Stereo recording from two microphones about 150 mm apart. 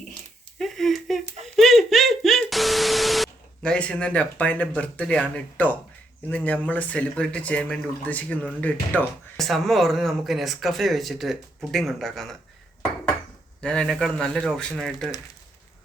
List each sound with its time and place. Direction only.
0.6 s a sound: centre (ahead or behind)
6.3 s speech: 10° left (ahead or behind)
13.6 s speech: 5° left (ahead or behind)